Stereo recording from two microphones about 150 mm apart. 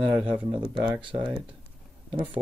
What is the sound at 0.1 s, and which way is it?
Speech, 10° right (ahead or behind).